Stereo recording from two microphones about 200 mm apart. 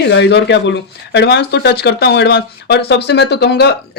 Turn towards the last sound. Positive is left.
turn(degrees=55)  # may be behind; listen again after turning